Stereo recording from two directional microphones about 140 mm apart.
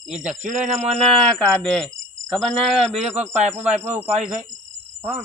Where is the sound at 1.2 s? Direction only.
5° left (ahead or behind).